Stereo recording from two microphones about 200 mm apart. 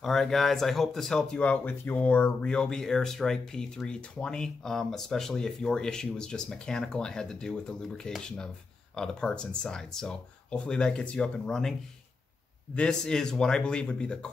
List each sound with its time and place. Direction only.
0.0 s speech: centre (ahead or behind)
12.7 s speech: 5° left (ahead or behind)